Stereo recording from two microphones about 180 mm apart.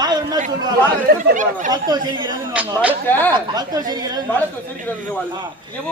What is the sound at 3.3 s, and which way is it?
Speech, 20° right (ahead or behind).